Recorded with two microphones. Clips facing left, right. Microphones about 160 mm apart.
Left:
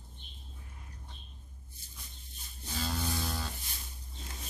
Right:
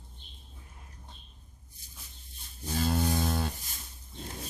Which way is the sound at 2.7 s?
50° right (ahead or behind).